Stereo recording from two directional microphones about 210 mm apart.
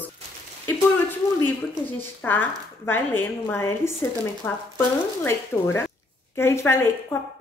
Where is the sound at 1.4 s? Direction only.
10° left (ahead or behind).